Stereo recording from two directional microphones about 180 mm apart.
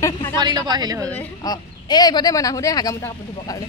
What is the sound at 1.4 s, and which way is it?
Speech, 20° left (ahead or behind).